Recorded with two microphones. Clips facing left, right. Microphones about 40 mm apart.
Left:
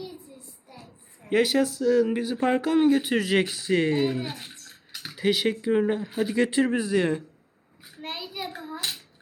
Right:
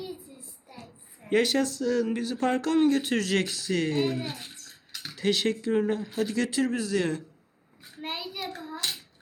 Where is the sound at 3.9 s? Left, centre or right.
Centre.